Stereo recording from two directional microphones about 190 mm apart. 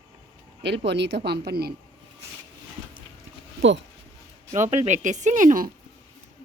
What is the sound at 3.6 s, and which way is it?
Speech, 75° right (ahead or behind).